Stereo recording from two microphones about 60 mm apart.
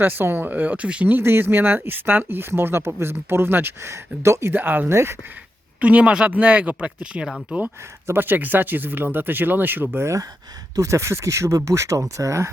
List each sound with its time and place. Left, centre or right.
0.0 s speech: right
1.1 s speech: right
4.5 s speech: right
4.9 s speech: right
5.8 s speech: right
8.0 s speech: right
10.8 s speech: right